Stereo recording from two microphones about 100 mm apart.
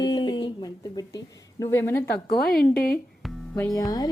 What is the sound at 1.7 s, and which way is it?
Speech, 25° left (ahead or behind).